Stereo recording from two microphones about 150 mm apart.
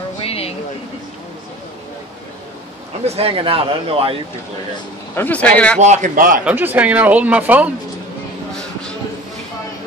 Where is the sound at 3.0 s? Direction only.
45° right (ahead or behind).